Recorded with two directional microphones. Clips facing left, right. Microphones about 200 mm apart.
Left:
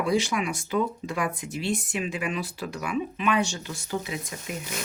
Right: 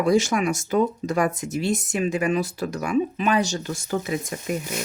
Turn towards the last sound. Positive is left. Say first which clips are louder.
# right 6 dB
turn(degrees=-45)  # may be behind; listen again after turning